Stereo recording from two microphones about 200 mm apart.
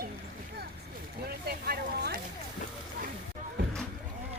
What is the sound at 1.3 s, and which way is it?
Vehicle, 50° right (ahead or behind).